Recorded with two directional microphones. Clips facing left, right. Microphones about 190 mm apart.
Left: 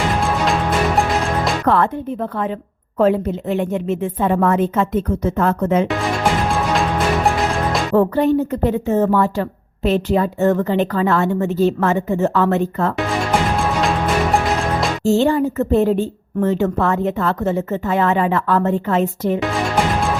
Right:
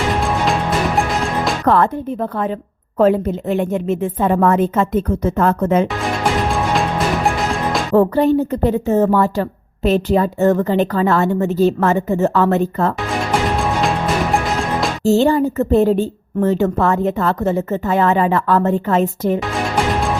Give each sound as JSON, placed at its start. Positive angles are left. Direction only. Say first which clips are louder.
{"t": 1.6, "sound": "speech", "louder": "right 2 dB", "side_deg": -40}
{"t": 3.0, "sound": "a woman's voice", "louder": "right 2 dB", "side_deg": -45}
{"t": 7.3, "sound": "music", "louder": "even", "side_deg": 0}
{"t": 7.9, "sound": "a woman's voice", "louder": "right 2 dB", "side_deg": -35}
{"t": 14.3, "sound": "music", "louder": "even", "side_deg": 0}
{"t": 15.0, "sound": "a woman's voice", "louder": "right 2 dB", "side_deg": -35}